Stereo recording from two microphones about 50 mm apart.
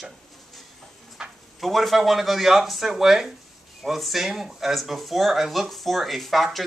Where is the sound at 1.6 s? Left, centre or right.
Centre.